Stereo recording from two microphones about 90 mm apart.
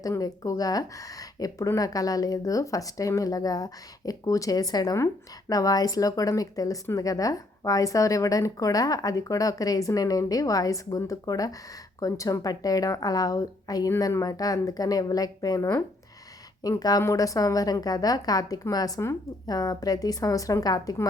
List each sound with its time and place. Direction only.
0.2 s a woman's voice: 40° left (ahead or behind)